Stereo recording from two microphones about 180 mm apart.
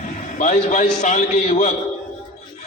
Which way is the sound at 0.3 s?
40° left (ahead or behind).